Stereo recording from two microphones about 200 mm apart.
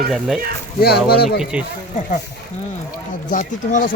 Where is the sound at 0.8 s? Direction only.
50° left (ahead or behind).